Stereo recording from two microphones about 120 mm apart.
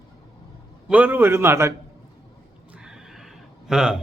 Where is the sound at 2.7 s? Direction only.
5° right (ahead or behind).